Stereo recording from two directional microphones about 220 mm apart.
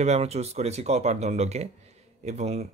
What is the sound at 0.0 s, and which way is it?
Speech, 30° right (ahead or behind).